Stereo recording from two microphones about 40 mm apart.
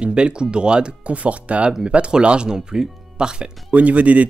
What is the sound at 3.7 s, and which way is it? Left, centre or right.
Speech, right.